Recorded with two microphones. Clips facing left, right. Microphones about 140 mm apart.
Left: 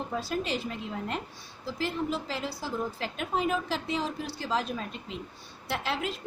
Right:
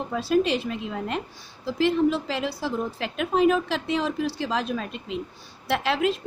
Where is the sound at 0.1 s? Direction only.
80° right.